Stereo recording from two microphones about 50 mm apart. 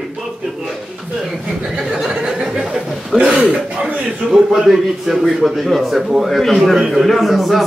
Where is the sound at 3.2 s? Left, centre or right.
Centre.